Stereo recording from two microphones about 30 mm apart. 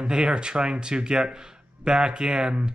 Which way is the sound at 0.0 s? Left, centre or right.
Right.